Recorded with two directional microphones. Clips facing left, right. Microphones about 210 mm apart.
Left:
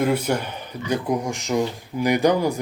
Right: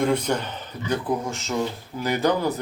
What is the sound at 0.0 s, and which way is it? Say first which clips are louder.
Speech: left 1 dB; 5° left (ahead or behind).